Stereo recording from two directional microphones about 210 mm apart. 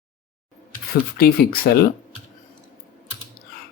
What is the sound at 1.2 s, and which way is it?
Speech, 45° left (ahead or behind).